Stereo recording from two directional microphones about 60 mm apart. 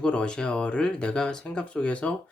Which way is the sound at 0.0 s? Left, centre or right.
Centre.